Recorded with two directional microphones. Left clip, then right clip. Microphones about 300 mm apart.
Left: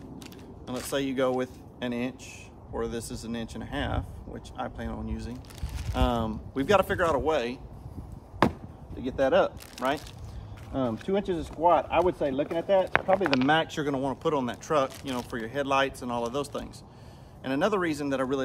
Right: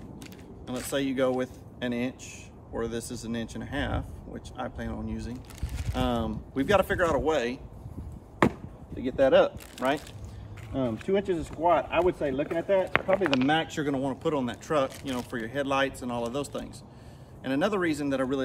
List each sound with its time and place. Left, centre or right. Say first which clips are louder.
0.2 s speech: left 1 dB; centre
8.4 s a sound: even; centre
10.7 s speech: right 1 dB; centre